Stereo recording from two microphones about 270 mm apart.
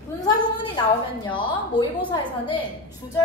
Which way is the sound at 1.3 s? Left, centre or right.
Centre.